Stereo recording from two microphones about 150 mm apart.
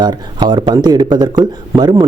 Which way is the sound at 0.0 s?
30° right (ahead or behind).